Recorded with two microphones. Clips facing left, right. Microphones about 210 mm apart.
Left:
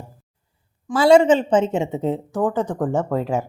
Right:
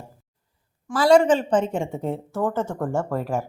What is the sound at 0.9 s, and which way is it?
A woman's voice, 25° left (ahead or behind).